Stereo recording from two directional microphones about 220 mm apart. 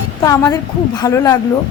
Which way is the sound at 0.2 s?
15° left (ahead or behind).